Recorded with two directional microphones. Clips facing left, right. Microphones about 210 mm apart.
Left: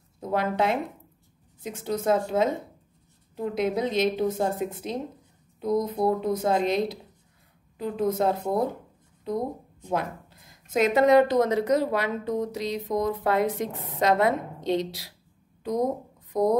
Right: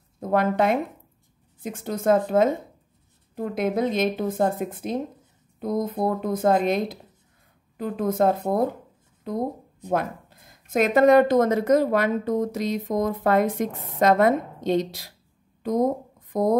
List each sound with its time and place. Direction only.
0.2 s a woman's voice: 50° right (ahead or behind)
3.5 s a woman's voice: 50° right (ahead or behind)